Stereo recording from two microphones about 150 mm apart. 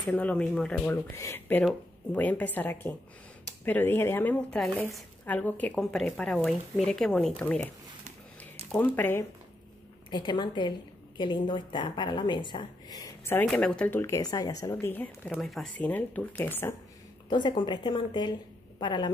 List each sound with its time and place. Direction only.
0.1 s speech: 10° left (ahead or behind)
0.8 s speech: 15° left (ahead or behind)
5.2 s speech: 10° left (ahead or behind)
8.7 s speech: 10° left (ahead or behind)
10.1 s speech: 30° left (ahead or behind)
13.5 s speech: 5° left (ahead or behind)
17.3 s a woman's voice: 30° left (ahead or behind)